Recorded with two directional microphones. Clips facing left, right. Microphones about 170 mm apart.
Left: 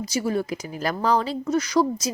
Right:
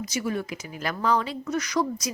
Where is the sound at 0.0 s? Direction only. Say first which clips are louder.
Left 4 dB; 30° left (ahead or behind).